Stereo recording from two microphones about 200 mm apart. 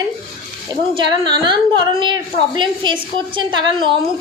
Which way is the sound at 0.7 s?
25° right (ahead or behind).